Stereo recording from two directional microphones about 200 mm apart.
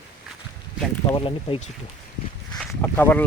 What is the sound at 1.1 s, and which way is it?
Speech, 25° left (ahead or behind).